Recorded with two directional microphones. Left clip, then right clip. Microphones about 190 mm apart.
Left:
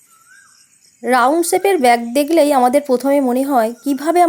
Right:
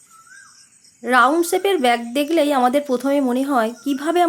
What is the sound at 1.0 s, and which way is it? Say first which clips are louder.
Speech: left 2 dB; 30° left (ahead or behind).